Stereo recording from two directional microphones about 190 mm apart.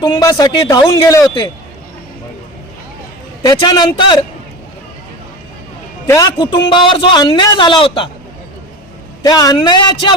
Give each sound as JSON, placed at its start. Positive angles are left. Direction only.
{"t": 0.0, "sound": "a man's voice", "side_deg": 20}
{"t": 3.4, "sound": "a man's voice", "side_deg": 20}
{"t": 6.1, "sound": "a man's voice", "side_deg": 20}
{"t": 9.2, "sound": "a man's voice", "side_deg": 20}